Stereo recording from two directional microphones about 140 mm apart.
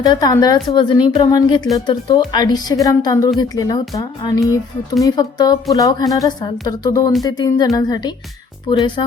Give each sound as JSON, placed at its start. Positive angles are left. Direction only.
{"t": 0.0, "sound": "a woman's voice", "side_deg": 25}